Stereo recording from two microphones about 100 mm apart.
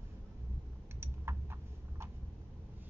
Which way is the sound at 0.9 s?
25° right (ahead or behind).